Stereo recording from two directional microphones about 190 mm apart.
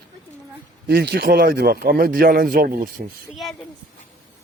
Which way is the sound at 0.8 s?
60° right (ahead or behind).